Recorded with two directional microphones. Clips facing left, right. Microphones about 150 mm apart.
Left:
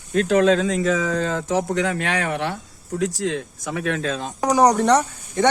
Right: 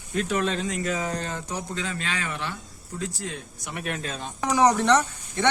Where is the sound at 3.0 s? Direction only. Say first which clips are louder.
Left 10 dB; 90° left.